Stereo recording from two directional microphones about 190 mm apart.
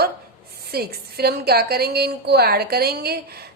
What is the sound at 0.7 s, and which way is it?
A woman's voice, 55° right (ahead or behind).